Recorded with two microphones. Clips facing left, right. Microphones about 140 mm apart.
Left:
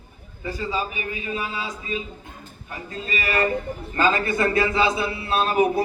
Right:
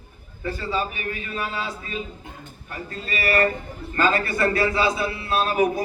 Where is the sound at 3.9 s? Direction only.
20° left (ahead or behind).